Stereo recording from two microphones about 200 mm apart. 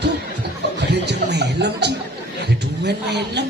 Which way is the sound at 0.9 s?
55° right (ahead or behind).